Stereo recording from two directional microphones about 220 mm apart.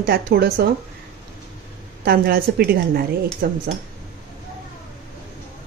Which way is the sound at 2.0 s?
45° right (ahead or behind).